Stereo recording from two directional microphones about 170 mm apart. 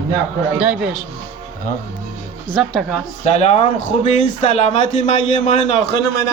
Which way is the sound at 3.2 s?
40° left (ahead or behind).